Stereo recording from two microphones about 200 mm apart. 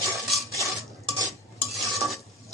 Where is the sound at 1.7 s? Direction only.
Centre (ahead or behind).